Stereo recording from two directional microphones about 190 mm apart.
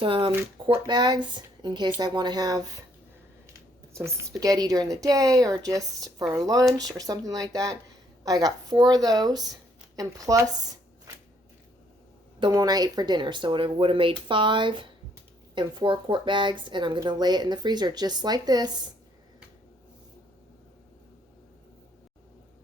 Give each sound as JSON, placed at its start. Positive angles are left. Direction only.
{"t": 0.0, "sound": "a woman's voice", "side_deg": -25}
{"t": 3.9, "sound": "a woman's voice", "side_deg": -15}
{"t": 12.4, "sound": "a woman's voice", "side_deg": -20}